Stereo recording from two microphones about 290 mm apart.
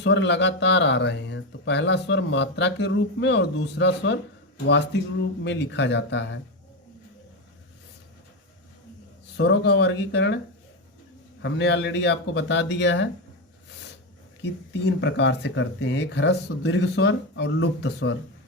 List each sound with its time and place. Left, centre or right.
0.0 s speech: left
9.4 s speech: left
11.4 s speech: left
14.8 s speech: left